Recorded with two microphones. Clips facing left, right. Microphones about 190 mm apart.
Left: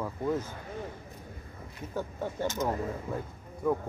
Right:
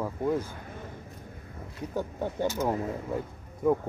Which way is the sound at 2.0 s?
15° right (ahead or behind).